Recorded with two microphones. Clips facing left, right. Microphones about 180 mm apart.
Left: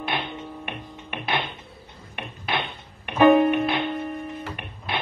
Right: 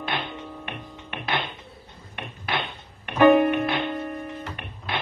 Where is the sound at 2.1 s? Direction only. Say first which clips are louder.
Left 1 dB; 20° left (ahead or behind).